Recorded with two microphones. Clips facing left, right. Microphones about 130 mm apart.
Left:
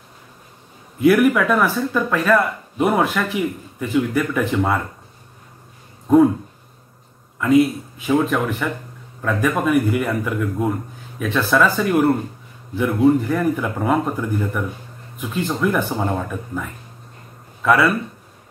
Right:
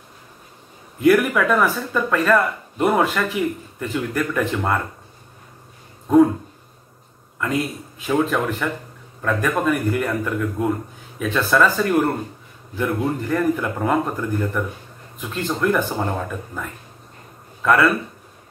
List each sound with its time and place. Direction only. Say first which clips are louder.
1.0 s speech: left 2 dB; centre (ahead or behind)
7.3 s a man's voice: left 9 dB; 5° left (ahead or behind)